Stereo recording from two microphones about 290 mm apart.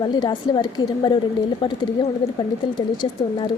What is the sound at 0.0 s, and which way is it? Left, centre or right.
A woman's voice, centre.